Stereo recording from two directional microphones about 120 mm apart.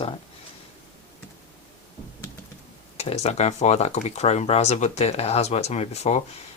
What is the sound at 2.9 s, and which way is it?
Speech, 60° left (ahead or behind).